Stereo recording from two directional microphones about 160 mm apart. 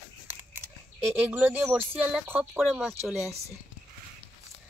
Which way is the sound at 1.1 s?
10° right (ahead or behind).